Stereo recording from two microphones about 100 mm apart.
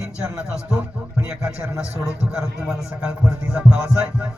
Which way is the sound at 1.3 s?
10° right (ahead or behind).